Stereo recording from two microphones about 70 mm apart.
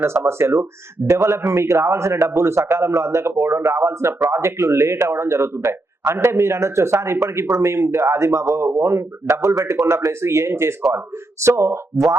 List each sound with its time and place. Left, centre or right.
0.0 s speech: right